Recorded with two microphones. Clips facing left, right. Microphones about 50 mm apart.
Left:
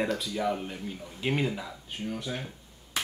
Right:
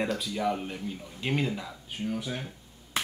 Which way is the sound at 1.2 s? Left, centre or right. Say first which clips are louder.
Left 1 dB; centre.